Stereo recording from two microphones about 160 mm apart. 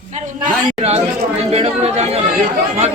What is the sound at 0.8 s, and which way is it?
Speech, 40° right (ahead or behind).